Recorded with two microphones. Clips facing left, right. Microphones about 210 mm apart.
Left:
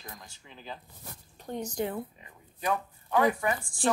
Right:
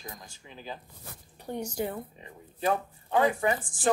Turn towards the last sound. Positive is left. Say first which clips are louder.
# right 1 dB
turn(degrees=-25)  # may be behind; listen again after turning